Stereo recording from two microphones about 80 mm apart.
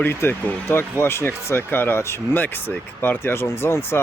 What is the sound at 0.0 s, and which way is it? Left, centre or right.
Speech, left.